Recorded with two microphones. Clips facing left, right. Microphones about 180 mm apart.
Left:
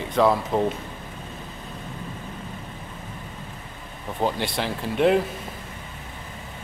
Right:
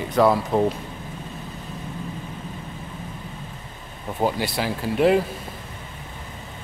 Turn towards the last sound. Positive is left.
turn(degrees=-5)  # may be behind; listen again after turning